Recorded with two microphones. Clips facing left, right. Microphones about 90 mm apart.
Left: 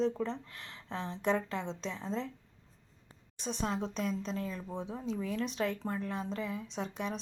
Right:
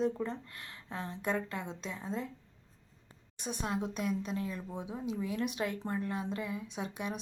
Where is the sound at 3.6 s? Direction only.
10° right (ahead or behind).